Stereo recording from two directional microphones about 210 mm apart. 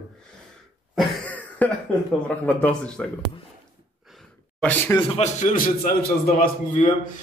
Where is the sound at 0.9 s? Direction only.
5° left (ahead or behind).